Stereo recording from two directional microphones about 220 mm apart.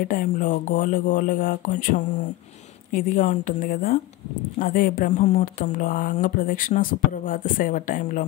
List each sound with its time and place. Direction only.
0.0 s speech: 35° left (ahead or behind)